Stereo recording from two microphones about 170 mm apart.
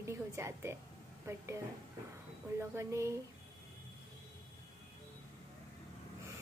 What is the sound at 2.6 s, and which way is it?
Speech, 15° right (ahead or behind).